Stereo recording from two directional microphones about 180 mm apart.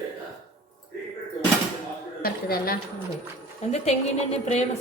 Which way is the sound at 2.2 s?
55° left (ahead or behind).